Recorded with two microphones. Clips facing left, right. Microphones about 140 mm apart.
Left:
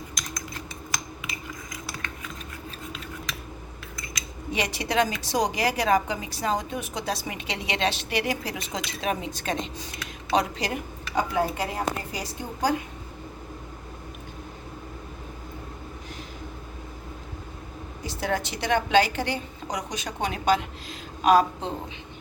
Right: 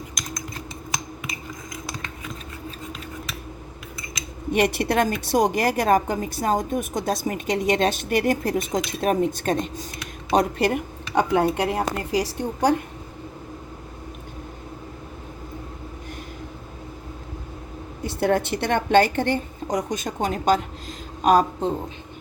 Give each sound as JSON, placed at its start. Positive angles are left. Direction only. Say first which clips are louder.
{"t": 4.5, "sound": "a woman's voice", "louder": "right 5 dB", "side_deg": -55}
{"t": 18.0, "sound": "a woman's voice", "louder": "right 7 dB", "side_deg": -55}